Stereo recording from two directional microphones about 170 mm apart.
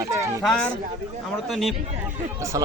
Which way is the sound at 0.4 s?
5° left (ahead or behind).